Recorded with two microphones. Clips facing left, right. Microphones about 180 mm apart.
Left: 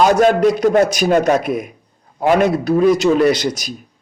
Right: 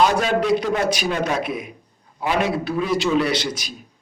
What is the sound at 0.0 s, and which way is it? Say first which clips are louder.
A man's voice: left 7 dB; 45° left (ahead or behind).